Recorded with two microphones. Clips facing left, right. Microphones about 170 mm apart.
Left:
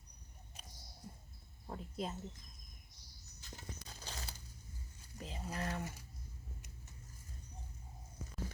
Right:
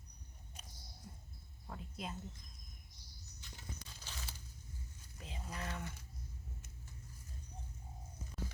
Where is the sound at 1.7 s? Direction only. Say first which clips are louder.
Left 4 dB; 30° left (ahead or behind).